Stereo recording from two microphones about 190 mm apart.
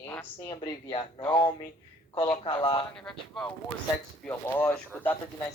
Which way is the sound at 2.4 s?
25° left (ahead or behind).